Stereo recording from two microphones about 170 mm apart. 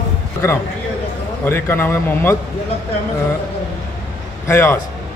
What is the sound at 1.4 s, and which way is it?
Speech, 10° left (ahead or behind).